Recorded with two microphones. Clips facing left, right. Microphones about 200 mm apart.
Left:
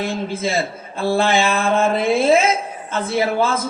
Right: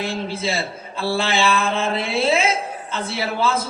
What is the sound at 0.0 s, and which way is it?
A man's voice, 50° left (ahead or behind).